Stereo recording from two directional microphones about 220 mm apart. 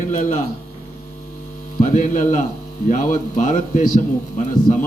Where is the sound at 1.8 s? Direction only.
35° left (ahead or behind).